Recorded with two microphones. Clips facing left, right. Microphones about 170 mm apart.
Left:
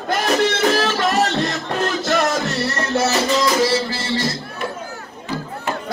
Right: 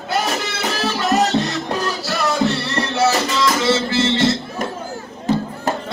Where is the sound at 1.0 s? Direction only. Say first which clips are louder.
Right 1 dB; 35° right (ahead or behind).